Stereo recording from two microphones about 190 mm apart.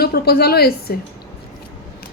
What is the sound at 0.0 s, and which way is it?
Speech, 55° left (ahead or behind).